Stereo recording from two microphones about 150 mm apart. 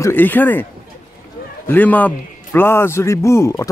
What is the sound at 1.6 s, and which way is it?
A man's voice, 10° left (ahead or behind).